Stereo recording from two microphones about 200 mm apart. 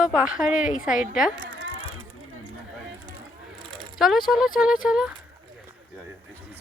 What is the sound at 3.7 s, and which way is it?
Speech, centre (ahead or behind).